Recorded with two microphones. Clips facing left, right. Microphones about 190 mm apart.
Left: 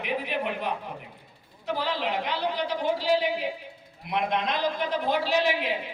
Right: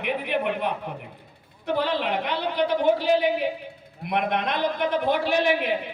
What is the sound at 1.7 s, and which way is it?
A woman's voice, 60° right (ahead or behind).